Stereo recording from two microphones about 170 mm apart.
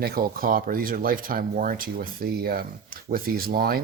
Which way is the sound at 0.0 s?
60° right (ahead or behind).